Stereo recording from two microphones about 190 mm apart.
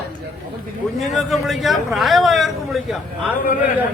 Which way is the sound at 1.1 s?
Centre (ahead or behind).